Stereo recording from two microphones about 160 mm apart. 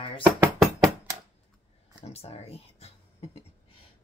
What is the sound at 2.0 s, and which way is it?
Speech, 40° left (ahead or behind).